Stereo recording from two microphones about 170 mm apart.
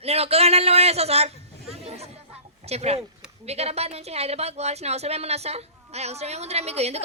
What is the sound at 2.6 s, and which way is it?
Speech, 40° right (ahead or behind).